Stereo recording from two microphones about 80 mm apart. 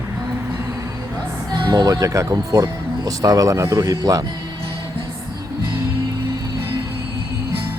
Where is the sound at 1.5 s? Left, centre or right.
Right.